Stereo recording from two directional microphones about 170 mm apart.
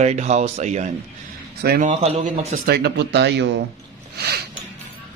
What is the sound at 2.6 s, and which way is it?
Speech, 70° right (ahead or behind).